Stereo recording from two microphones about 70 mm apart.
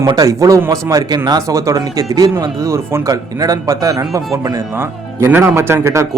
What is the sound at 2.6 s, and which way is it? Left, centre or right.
Speech, right.